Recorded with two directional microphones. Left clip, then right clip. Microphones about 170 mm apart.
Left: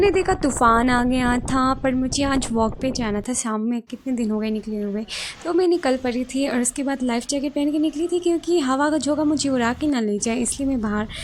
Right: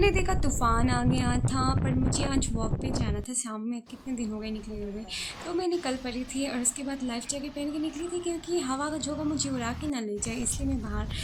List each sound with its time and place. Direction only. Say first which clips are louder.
0.0 s a woman's voice: left 8 dB; 35° left (ahead or behind)